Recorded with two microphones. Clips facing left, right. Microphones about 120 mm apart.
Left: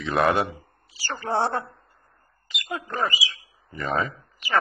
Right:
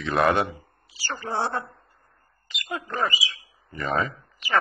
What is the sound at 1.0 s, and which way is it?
Speech, 30° left (ahead or behind).